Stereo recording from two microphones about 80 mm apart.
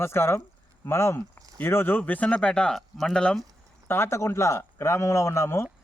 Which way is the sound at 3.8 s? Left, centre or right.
Left.